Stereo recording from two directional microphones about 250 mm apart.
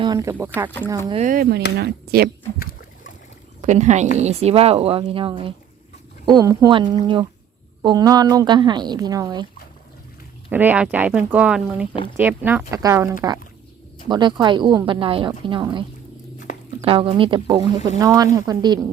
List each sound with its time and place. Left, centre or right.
0.0 s speech: centre
1.2 s speech: right
2.6 s a sound: left
3.6 s a woman's voice: right
10.5 s speech: centre
14.1 s a woman's voice: centre
16.5 s a sound: left
16.8 s a woman's voice: right